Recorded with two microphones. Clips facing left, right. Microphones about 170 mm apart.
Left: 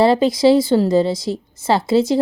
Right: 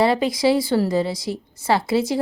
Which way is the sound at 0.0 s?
25° left (ahead or behind).